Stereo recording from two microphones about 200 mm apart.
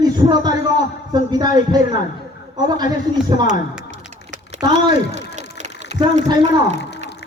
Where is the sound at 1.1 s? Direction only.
20° right (ahead or behind).